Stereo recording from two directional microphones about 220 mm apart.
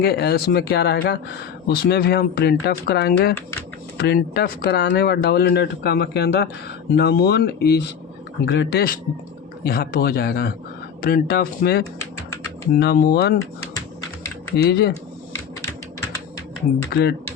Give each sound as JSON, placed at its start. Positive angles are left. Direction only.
{"t": 0.0, "sound": "speech", "side_deg": 45}
{"t": 14.5, "sound": "speech", "side_deg": 50}
{"t": 16.9, "sound": "speech", "side_deg": 45}